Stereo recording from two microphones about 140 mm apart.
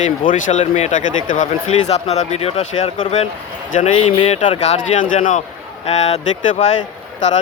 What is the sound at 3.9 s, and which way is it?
Speech, 40° left (ahead or behind).